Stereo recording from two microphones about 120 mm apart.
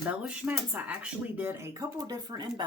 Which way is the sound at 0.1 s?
10° right (ahead or behind).